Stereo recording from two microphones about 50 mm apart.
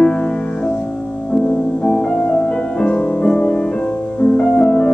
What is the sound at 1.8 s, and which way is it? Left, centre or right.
Music, centre.